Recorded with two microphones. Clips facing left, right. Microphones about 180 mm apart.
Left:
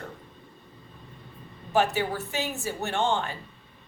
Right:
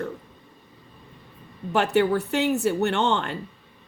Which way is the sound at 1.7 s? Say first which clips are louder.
Right 4 dB; 65° right (ahead or behind).